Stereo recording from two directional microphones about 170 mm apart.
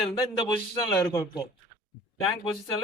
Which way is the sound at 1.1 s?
20° left (ahead or behind).